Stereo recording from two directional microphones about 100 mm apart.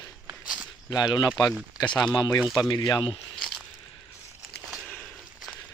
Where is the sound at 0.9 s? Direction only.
45° left (ahead or behind).